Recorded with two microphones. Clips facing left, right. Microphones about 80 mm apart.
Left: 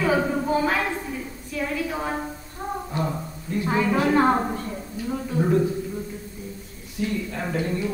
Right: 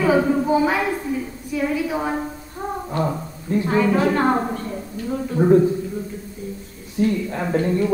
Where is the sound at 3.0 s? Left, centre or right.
Centre.